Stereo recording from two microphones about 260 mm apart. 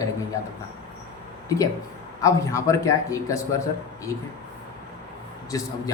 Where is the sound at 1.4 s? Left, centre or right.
Centre.